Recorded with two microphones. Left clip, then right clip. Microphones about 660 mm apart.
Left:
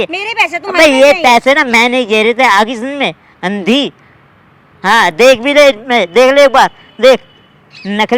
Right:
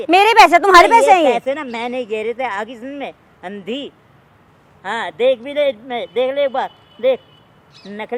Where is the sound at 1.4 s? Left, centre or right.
Left.